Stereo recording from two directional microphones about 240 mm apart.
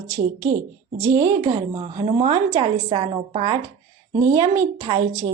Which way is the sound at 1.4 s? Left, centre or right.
Right.